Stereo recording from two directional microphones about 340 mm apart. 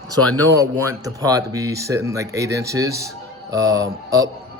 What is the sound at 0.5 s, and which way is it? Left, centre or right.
Speech, centre.